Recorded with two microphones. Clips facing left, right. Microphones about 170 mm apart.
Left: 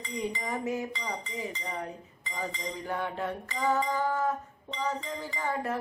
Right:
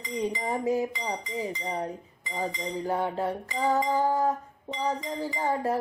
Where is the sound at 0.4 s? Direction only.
35° right (ahead or behind).